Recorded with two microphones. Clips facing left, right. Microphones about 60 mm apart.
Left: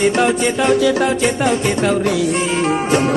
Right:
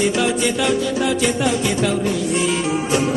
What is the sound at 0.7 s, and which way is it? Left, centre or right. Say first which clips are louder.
Music: left 6 dB; left.